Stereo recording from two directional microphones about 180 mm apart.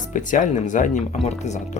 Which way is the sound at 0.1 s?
45° left (ahead or behind).